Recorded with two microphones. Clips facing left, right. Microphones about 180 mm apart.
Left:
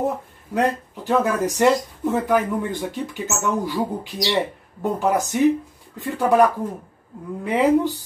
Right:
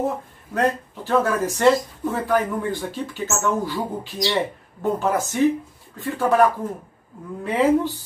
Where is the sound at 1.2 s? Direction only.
15° left (ahead or behind).